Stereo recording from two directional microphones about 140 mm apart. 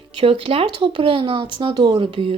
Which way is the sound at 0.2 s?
40° right (ahead or behind).